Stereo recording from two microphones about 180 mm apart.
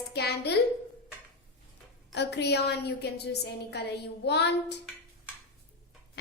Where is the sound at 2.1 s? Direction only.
70° left (ahead or behind).